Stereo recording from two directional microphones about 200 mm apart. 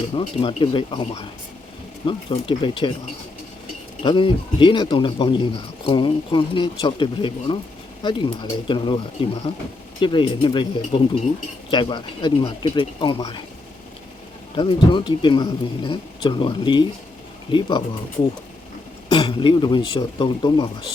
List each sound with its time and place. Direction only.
0.1 s speech: 25° left (ahead or behind)
4.0 s speech: 25° left (ahead or behind)
14.5 s speech: 25° left (ahead or behind)
19.0 s speech: 30° left (ahead or behind)